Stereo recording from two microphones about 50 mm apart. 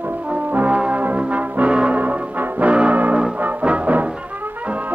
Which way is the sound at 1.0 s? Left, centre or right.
Right.